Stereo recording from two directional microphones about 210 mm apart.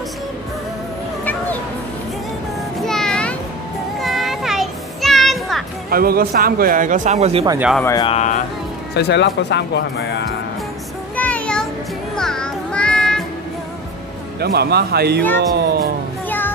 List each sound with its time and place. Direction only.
2.8 s a sound: centre (ahead or behind)
4.0 s child singing: centre (ahead or behind)
5.9 s speech: 45° right (ahead or behind)
7.4 s speech: 10° right (ahead or behind)
7.8 s speech: 15° left (ahead or behind)
8.1 s speech: 35° left (ahead or behind)
8.9 s speech: 55° left (ahead or behind)
11.1 s a sound: 5° left (ahead or behind)
12.2 s music: 5° left (ahead or behind)
14.4 s speech: 50° right (ahead or behind)
16.3 s music: 10° left (ahead or behind)